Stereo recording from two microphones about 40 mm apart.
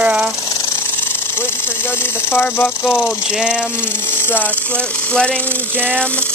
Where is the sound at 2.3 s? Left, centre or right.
Left.